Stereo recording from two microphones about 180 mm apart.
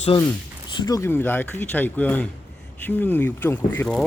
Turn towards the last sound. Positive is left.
turn(degrees=10)  # may be behind; listen again after turning